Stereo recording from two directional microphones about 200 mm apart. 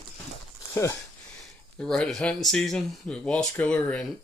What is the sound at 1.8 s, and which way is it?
Speech, 5° left (ahead or behind).